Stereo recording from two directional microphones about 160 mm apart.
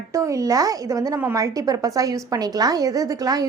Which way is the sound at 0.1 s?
20° right (ahead or behind).